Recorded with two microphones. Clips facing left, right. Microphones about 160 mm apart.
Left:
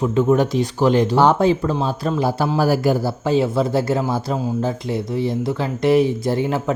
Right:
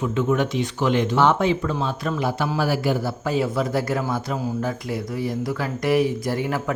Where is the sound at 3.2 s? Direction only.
25° left (ahead or behind).